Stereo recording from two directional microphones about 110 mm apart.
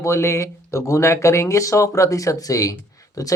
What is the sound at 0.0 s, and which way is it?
Speech, 25° left (ahead or behind).